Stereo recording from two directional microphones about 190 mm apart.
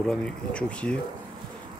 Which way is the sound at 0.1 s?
5° left (ahead or behind).